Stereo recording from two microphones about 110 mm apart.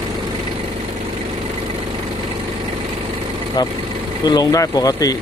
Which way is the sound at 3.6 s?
40° left (ahead or behind).